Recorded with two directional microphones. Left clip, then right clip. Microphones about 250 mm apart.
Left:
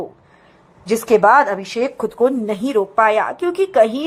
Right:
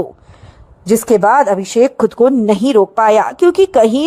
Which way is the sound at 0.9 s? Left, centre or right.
Right.